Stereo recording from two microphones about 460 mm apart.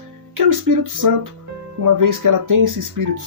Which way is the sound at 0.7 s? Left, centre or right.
Right.